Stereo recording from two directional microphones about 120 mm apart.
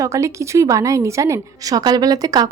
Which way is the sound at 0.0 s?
25° right (ahead or behind).